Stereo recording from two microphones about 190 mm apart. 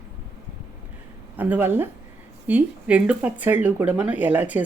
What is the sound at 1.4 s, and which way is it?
Speech, 10° right (ahead or behind).